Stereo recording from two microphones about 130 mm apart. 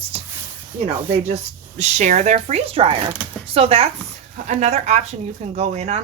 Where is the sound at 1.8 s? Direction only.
65° right (ahead or behind); by 3.9 s 50° right (ahead or behind).